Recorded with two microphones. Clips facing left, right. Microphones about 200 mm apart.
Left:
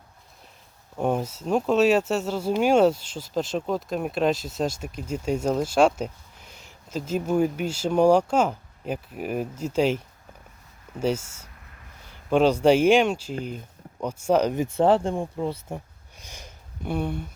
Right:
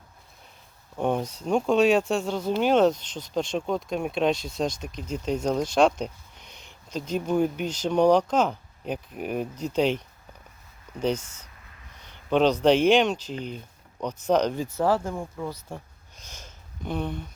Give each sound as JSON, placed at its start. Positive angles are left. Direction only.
{"t": 0.9, "sound": "speech", "side_deg": 5}
{"t": 10.9, "sound": "a sound", "side_deg": 5}
{"t": 12.3, "sound": "speech", "side_deg": 10}
{"t": 14.6, "sound": "speech", "side_deg": 25}
{"t": 16.2, "sound": "sniff", "side_deg": 15}